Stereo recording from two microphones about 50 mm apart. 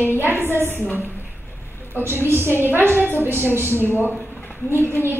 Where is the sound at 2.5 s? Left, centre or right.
Right.